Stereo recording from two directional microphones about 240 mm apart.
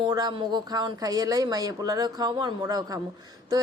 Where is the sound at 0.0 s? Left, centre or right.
Centre.